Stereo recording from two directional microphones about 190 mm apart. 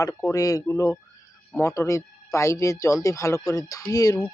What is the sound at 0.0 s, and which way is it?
Speech, 15° left (ahead or behind).